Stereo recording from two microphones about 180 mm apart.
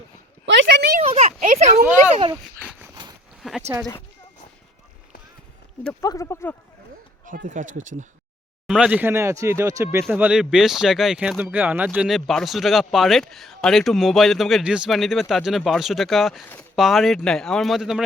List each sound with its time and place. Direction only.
0.4 s speech: 85° right
1.0 s speech: 35° right (ahead or behind)
3.4 s speech: centre (ahead or behind)
5.8 s speech: 15° left (ahead or behind)
7.3 s speech: 45° right (ahead or behind)
8.6 s speech: 5° right (ahead or behind)
10.1 s speech: 5° right (ahead or behind)